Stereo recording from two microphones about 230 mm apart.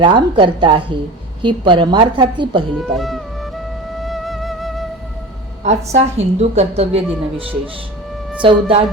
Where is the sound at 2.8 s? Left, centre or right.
Centre.